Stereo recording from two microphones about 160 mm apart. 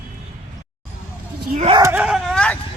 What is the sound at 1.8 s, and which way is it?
Speech, 15° right (ahead or behind).